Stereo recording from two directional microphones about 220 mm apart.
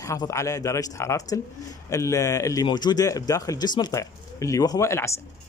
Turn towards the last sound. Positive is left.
turn(degrees=10)  # may be behind; listen again after turning